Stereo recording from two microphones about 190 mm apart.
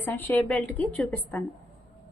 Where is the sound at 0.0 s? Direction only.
10° left (ahead or behind).